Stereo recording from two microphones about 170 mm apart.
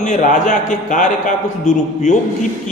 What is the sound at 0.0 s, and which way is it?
A man's voice, 45° left (ahead or behind).